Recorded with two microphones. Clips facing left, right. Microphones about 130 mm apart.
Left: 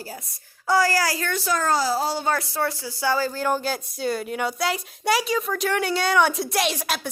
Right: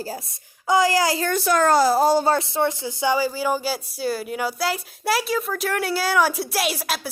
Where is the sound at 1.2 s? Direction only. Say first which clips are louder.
Right 5 dB; 55° right (ahead or behind).